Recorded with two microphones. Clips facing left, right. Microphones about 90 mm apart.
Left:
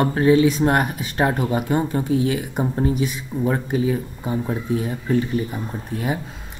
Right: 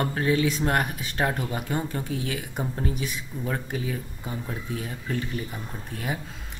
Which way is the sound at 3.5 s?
35° left (ahead or behind).